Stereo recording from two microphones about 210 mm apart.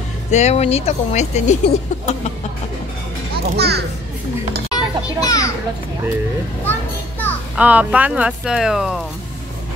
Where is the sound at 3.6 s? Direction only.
50° right (ahead or behind).